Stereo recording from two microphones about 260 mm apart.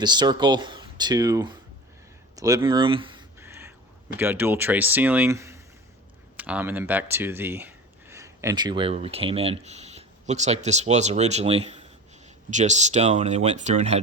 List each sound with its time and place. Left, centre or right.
0.0 s speech: centre
3.4 s a sound: centre
4.2 s speech: centre; by 14.0 s right